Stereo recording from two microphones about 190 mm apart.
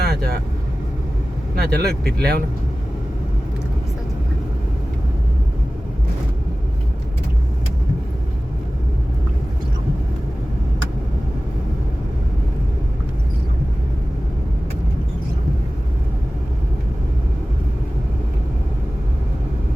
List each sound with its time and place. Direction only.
0.0 s vehicle: 55° right (ahead or behind)
1.5 s speech: 55° right (ahead or behind)